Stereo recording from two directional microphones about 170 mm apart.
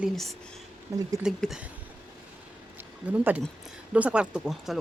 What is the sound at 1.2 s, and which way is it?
Speech, 5° right (ahead or behind).